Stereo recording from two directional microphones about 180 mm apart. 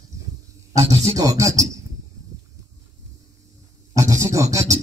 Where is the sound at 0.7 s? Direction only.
20° right (ahead or behind).